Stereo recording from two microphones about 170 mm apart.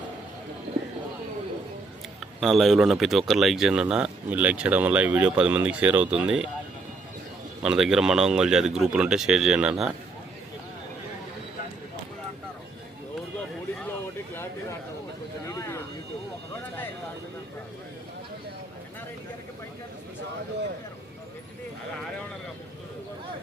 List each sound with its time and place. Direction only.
2.4 s speech: centre (ahead or behind)
7.6 s speech: 5° right (ahead or behind)
15.4 s vehicle: 20° left (ahead or behind)